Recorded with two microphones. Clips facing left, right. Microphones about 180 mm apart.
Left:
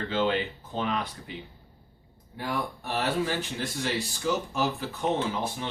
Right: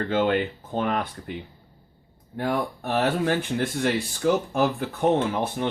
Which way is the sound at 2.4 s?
50° right (ahead or behind).